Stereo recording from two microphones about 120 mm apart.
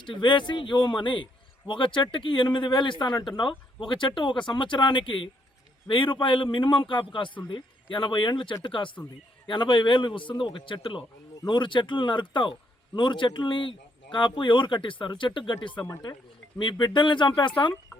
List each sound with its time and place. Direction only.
0.0 s speech: 40° left (ahead or behind)